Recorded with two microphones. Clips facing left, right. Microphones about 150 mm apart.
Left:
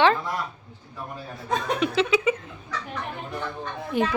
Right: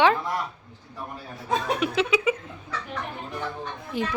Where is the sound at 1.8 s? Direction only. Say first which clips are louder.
Left 1 dB; 10° right (ahead or behind).